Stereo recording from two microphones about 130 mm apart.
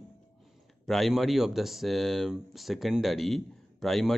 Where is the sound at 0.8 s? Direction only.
Centre (ahead or behind).